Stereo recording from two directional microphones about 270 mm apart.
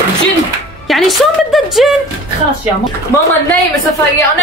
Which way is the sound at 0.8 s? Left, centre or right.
Centre.